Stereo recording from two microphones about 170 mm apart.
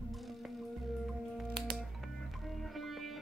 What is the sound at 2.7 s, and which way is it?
Music, centre (ahead or behind).